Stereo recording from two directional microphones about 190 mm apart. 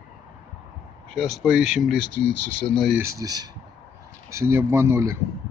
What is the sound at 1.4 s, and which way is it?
Speech, 5° right (ahead or behind).